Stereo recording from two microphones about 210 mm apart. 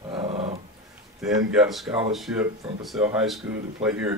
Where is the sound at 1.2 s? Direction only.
Centre (ahead or behind).